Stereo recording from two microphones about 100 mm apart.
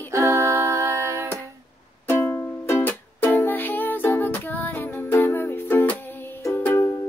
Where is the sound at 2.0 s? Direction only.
20° left (ahead or behind).